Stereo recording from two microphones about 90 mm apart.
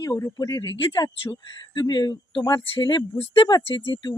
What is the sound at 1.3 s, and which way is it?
Speech, 60° left (ahead or behind).